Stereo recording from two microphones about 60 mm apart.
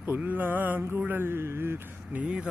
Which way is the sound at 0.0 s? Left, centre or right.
Right.